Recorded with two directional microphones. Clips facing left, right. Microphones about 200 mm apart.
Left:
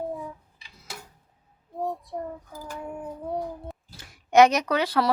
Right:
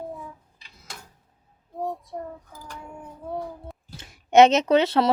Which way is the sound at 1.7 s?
Centre (ahead or behind).